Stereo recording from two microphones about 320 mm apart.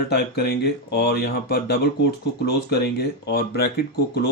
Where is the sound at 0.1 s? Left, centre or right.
Left.